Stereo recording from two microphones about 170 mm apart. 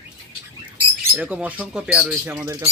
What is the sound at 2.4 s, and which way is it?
Speech, 15° right (ahead or behind).